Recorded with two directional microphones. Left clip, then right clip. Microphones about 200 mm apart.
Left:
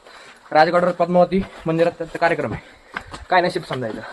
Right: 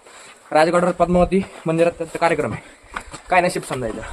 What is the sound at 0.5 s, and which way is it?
Speech, 10° right (ahead or behind).